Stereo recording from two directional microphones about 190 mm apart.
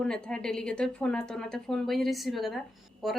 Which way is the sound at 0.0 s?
5° left (ahead or behind).